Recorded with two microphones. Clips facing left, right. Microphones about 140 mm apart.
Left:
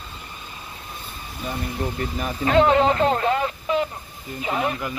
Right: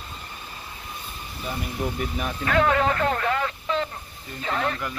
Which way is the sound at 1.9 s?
Centre (ahead or behind).